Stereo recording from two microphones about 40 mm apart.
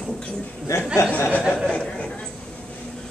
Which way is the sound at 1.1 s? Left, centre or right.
Left.